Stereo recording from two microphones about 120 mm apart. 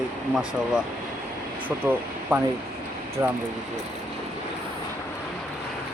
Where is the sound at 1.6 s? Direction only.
15° right (ahead or behind).